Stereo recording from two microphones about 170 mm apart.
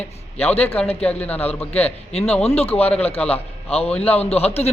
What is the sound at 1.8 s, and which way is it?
Speech, 35° left (ahead or behind).